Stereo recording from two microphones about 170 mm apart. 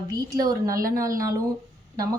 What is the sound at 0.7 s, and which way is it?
Speech, 55° right (ahead or behind).